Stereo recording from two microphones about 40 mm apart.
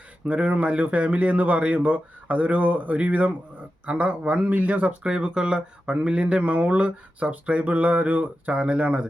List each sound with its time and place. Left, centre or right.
0.3 s speech: right
5.1 s speech: right